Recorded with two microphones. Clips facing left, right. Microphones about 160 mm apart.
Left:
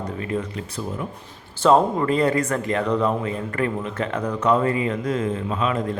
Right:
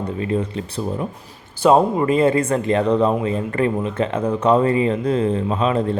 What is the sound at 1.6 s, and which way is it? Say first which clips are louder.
Speech: right 2 dB; 15° right (ahead or behind).